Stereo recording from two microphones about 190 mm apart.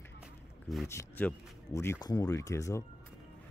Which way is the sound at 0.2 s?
Centre (ahead or behind).